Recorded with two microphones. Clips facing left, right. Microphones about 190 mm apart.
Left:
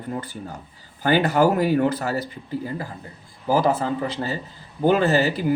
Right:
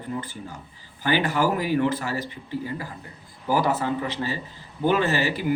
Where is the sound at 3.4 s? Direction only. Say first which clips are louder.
Left 3 dB; 30° left (ahead or behind).